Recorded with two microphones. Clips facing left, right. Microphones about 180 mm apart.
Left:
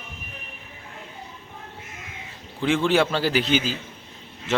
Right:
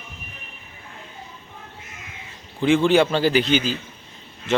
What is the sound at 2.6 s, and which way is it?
A man's voice, centre (ahead or behind).